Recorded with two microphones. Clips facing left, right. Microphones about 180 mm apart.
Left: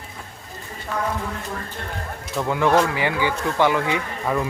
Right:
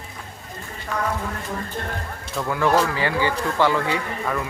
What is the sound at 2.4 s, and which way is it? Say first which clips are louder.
Speech: left 1 dB; 20° left (ahead or behind).